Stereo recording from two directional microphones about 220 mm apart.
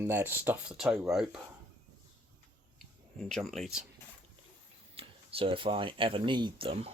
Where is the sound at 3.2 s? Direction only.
Centre (ahead or behind).